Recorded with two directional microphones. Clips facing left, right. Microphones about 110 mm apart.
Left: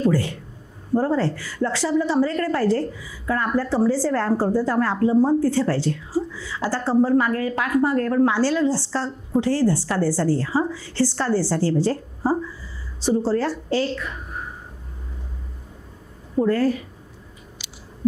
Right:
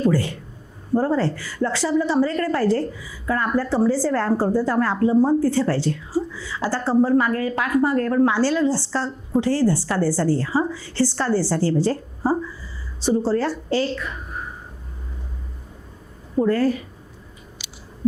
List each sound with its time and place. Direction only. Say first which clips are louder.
0.0 s a woman's voice: even; 20° right (ahead or behind)
16.3 s a woman's voice: even; 25° right (ahead or behind)